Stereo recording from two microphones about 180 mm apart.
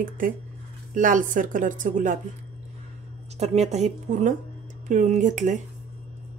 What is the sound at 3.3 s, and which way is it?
A woman's voice, 35° right (ahead or behind).